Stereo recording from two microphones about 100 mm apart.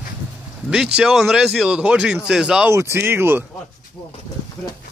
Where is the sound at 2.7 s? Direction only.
25° right (ahead or behind).